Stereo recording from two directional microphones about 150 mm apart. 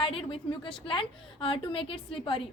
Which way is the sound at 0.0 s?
35° left (ahead or behind).